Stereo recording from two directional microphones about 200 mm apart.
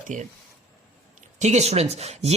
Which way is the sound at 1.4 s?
35° right (ahead or behind).